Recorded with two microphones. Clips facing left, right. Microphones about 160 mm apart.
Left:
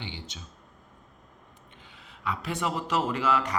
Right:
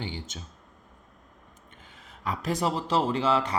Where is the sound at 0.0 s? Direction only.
45° right (ahead or behind).